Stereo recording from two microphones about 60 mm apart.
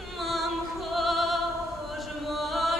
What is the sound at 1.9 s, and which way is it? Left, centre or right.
Chant, centre.